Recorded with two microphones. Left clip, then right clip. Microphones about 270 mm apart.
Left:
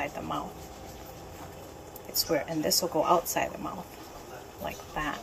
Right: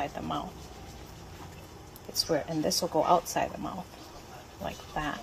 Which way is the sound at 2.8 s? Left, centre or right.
Right.